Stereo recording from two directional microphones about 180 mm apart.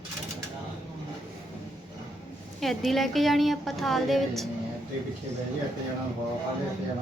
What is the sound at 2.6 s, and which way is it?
A woman's voice, centre (ahead or behind).